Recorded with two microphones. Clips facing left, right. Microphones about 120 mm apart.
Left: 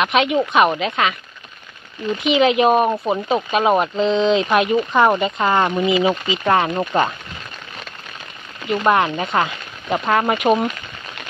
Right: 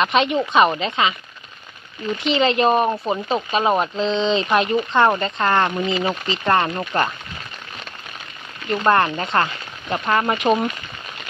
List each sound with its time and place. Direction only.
0.0 s speech: 5° left (ahead or behind)
2.2 s speech: 5° left (ahead or behind)
6.7 s speech: 20° left (ahead or behind)
8.6 s speech: 5° left (ahead or behind)